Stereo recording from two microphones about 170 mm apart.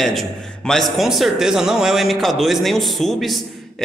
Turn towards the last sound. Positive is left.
turn(degrees=0)  # may be behind; listen again after turning